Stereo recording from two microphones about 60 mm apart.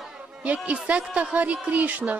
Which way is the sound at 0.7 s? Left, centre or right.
Right.